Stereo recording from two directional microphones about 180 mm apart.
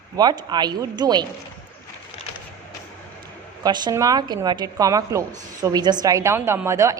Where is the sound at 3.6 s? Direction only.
25° right (ahead or behind).